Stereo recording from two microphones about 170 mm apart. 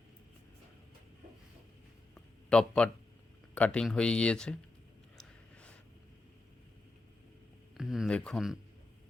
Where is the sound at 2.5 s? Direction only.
5° left (ahead or behind).